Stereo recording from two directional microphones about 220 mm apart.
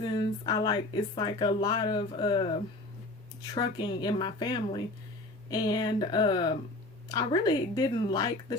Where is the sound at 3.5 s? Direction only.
20° left (ahead or behind).